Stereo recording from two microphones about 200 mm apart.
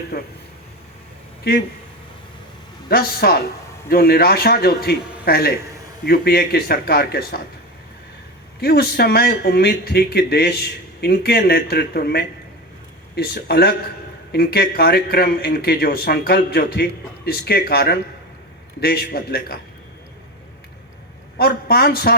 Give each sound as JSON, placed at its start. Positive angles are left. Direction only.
{"t": 0.1, "sound": "speech", "side_deg": 50}
{"t": 1.5, "sound": "speech", "side_deg": 50}
{"t": 2.9, "sound": "speech", "side_deg": 50}
{"t": 8.6, "sound": "speech", "side_deg": 50}
{"t": 21.3, "sound": "speech", "side_deg": 50}